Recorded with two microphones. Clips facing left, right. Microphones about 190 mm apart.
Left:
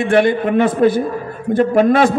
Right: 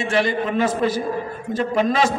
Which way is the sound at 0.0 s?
55° left (ahead or behind).